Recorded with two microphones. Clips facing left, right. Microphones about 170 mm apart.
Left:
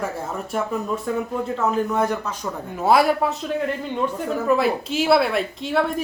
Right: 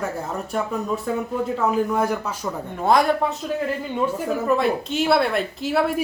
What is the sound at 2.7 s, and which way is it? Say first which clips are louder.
A woman's voice: left 1 dB; 5° left (ahead or behind).